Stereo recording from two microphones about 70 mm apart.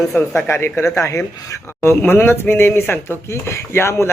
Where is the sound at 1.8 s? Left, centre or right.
Left.